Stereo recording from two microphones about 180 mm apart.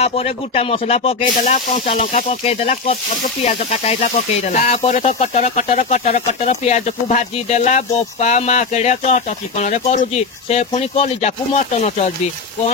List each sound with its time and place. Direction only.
0.0 s snake: 35° left (ahead or behind)